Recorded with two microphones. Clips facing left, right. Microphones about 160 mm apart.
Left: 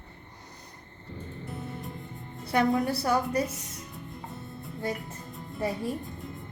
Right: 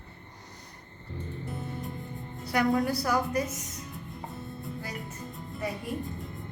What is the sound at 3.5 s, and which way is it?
Music, centre (ahead or behind).